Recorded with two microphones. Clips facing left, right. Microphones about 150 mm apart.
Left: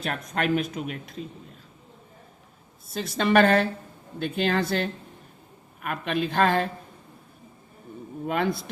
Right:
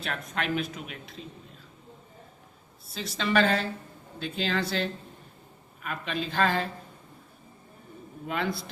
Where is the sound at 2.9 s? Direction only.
50° left (ahead or behind).